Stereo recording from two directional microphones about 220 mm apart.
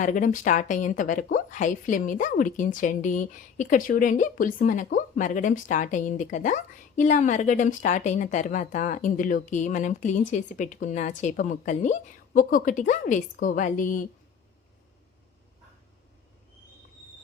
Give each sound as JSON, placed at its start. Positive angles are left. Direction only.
{"t": 0.0, "sound": "a woman's voice", "side_deg": 35}